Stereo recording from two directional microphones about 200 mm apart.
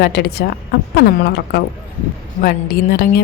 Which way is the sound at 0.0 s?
55° left (ahead or behind).